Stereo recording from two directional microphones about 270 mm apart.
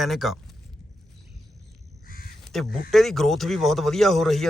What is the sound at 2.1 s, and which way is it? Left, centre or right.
Crow, left.